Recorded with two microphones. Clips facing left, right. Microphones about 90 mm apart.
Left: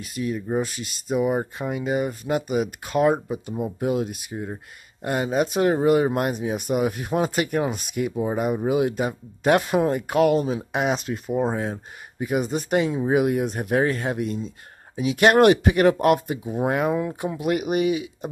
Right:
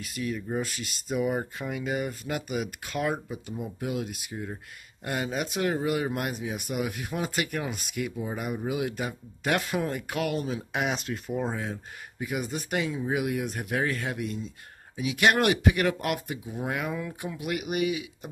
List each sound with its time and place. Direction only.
0.0 s speech: 25° left (ahead or behind)
8.1 s speech: 40° left (ahead or behind); by 11.5 s 20° left (ahead or behind)
11.5 s speech: 35° left (ahead or behind)